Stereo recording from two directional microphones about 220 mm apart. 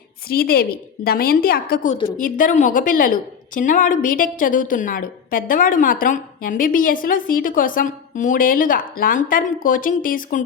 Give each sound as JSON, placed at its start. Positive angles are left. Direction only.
{"t": 0.3, "sound": "a woman's voice", "side_deg": 45}